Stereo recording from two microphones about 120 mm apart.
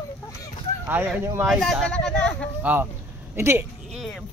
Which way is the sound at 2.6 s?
15° right (ahead or behind).